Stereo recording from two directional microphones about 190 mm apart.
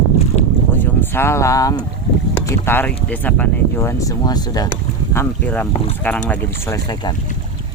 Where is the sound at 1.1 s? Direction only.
15° left (ahead or behind).